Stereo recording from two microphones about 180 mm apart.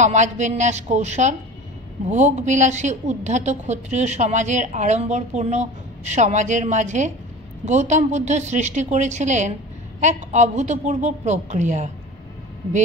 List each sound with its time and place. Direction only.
0.0 s a woman's voice: 40° right (ahead or behind)